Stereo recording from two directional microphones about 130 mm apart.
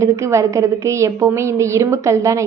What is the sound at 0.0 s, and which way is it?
A woman's voice, 25° right (ahead or behind).